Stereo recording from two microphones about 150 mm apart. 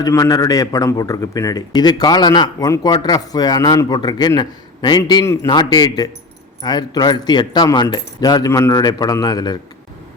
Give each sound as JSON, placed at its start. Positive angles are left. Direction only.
{"t": 0.0, "sound": "a man's voice", "side_deg": 25}
{"t": 5.2, "sound": "a man's voice", "side_deg": 20}
{"t": 5.5, "sound": "a man's voice", "side_deg": 30}